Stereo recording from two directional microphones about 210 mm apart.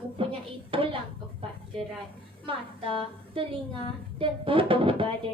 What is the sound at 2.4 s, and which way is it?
Speech, 25° right (ahead or behind).